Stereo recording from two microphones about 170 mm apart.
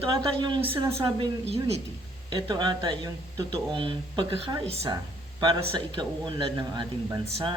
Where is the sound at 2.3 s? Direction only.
25° right (ahead or behind).